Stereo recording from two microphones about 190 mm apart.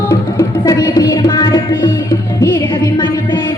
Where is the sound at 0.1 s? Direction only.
20° left (ahead or behind).